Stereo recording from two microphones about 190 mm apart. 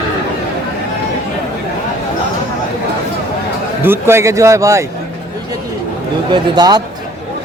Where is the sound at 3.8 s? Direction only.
10° right (ahead or behind).